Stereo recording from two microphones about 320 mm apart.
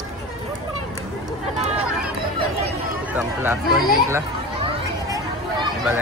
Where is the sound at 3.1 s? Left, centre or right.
Centre.